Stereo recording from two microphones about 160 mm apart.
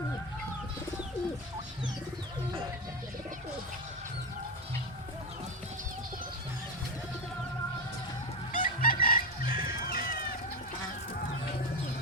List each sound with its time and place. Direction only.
8.5 s fowl: 60° left (ahead or behind)